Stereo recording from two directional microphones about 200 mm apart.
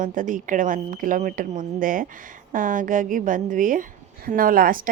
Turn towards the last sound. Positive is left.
turn(degrees=-45)  # may be behind; listen again after turning